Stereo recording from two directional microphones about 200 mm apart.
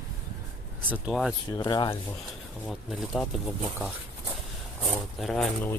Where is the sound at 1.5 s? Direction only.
20° left (ahead or behind).